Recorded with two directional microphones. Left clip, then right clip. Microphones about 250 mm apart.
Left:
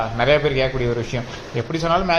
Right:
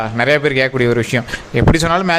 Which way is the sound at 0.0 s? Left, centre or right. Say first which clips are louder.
Right 3 dB; right.